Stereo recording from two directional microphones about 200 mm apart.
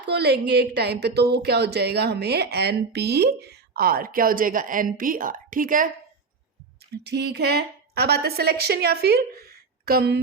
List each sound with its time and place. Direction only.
0.0 s a woman's voice: 55° right (ahead or behind)
6.9 s a woman's voice: 55° right (ahead or behind)